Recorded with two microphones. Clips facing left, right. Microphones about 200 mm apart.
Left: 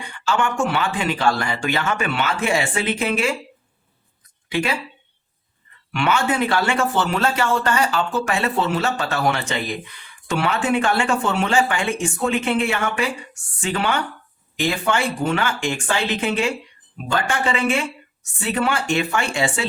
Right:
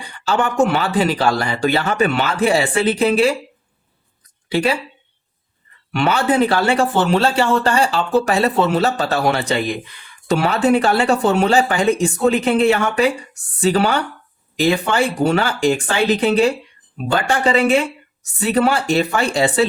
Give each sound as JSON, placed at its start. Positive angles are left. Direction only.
{"t": 0.0, "sound": "speech", "side_deg": -35}
{"t": 4.4, "sound": "speech", "side_deg": -35}
{"t": 5.9, "sound": "speech", "side_deg": -35}